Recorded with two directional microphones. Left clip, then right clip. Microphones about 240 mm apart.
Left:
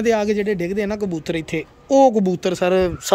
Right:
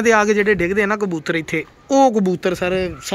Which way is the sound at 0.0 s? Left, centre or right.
Centre.